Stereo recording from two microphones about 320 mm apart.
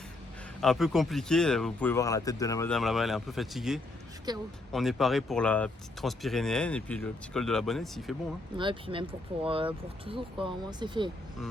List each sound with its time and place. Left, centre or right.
0.6 s speech: centre
4.3 s speech: centre
4.7 s speech: centre
8.5 s speech: centre